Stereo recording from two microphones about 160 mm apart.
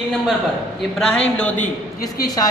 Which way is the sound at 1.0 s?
5° left (ahead or behind).